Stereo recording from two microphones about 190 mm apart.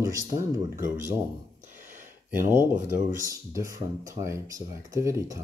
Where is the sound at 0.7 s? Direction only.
45° right (ahead or behind).